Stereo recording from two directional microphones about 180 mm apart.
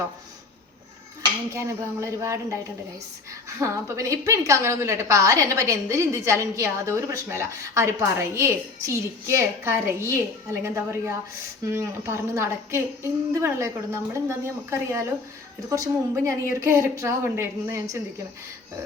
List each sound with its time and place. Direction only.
1.5 s a woman's voice: 15° right (ahead or behind)
3.6 s a woman's voice: 15° right (ahead or behind)